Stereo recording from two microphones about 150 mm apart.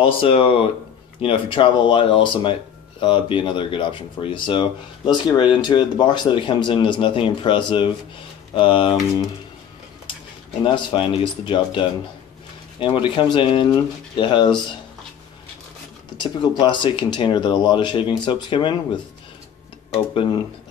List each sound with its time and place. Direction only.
0.0 s speech: 35° left (ahead or behind)
10.6 s speech: 35° left (ahead or behind)
16.2 s speech: 30° left (ahead or behind)
19.9 s speech: 35° left (ahead or behind)